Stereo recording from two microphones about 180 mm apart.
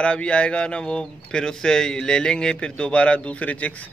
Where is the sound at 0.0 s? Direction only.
5° left (ahead or behind).